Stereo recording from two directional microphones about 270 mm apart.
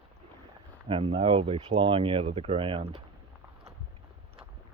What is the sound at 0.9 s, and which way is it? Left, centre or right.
Speech, right.